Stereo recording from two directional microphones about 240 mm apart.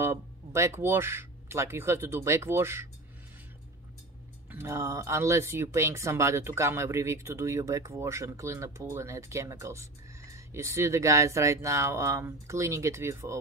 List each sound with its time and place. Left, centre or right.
0.0 s speech: centre
4.5 s speech: centre